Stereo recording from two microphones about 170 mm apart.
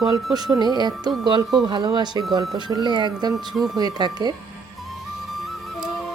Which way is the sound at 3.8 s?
25° right (ahead or behind).